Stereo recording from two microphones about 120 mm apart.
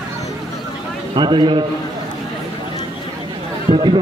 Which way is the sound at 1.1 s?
40° right (ahead or behind).